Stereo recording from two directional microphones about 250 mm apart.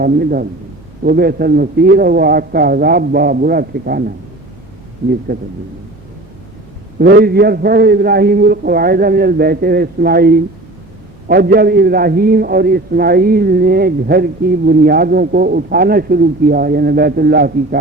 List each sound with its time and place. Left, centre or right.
0.0 s a man's voice: right
5.3 s a man's voice: right
7.0 s a man's voice: right